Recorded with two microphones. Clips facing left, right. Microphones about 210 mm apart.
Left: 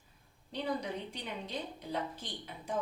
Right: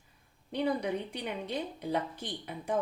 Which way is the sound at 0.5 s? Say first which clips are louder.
Right 6 dB; 60° right (ahead or behind).